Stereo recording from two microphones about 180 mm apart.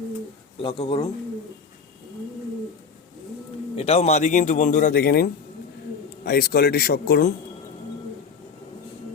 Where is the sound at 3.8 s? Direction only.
35° left (ahead or behind); by 7.3 s 55° left (ahead or behind).